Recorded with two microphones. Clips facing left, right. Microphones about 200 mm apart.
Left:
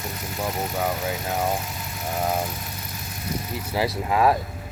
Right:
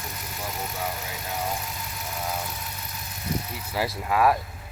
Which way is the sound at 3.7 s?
20° left (ahead or behind).